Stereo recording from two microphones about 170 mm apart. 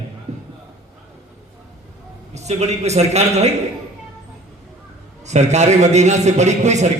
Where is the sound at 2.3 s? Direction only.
40° right (ahead or behind).